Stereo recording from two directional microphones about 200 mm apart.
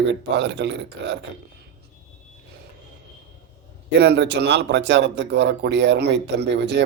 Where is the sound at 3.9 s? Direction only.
55° right (ahead or behind).